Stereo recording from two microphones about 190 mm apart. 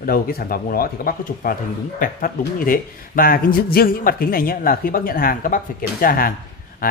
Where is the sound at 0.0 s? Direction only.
50° left (ahead or behind).